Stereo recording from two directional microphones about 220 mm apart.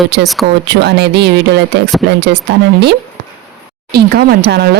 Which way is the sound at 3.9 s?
45° right (ahead or behind).